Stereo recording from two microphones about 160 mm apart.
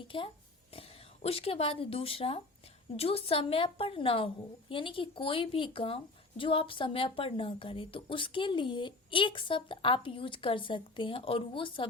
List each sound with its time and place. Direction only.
0.0 s a child's voice: 30° left (ahead or behind)